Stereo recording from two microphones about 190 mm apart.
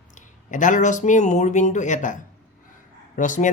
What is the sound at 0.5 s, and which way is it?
Speech, 40° left (ahead or behind).